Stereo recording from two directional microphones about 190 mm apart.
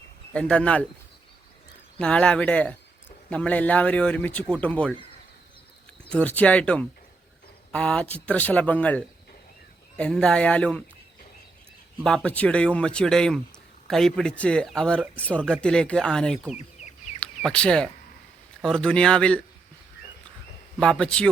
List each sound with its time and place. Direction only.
0.3 s speech: 5° left (ahead or behind)
2.0 s a man's voice: 5° left (ahead or behind)
6.1 s a man's voice: 5° left (ahead or behind)
12.0 s a man's voice: 5° left (ahead or behind)
16.6 s chicken: 35° left (ahead or behind)
17.4 s speech: 5° left (ahead or behind)
20.7 s speech: centre (ahead or behind)